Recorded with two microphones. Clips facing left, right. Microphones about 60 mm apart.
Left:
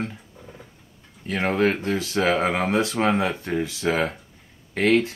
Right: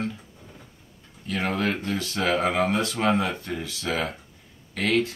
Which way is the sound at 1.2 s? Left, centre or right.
Left.